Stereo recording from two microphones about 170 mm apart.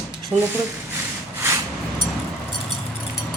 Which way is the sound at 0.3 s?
15° right (ahead or behind).